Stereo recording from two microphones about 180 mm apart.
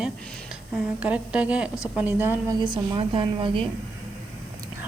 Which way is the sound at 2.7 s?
25° right (ahead or behind).